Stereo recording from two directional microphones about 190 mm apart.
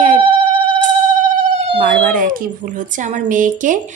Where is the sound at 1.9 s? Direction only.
45° right (ahead or behind).